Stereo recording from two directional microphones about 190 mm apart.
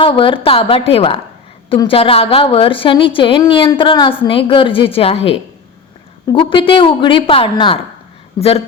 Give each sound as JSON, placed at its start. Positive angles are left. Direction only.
{"t": 0.0, "sound": "a woman's voice", "side_deg": 30}
{"t": 6.2, "sound": "a woman's voice", "side_deg": 25}